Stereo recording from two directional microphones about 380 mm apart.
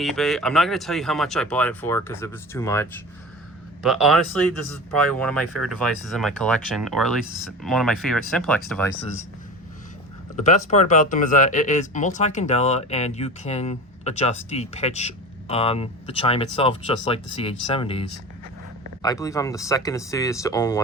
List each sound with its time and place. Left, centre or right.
0.0 s speech: centre
3.8 s speech: centre
10.3 s speech: centre
19.0 s speech: centre